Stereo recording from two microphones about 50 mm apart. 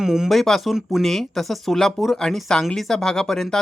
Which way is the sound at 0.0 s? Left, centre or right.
Centre.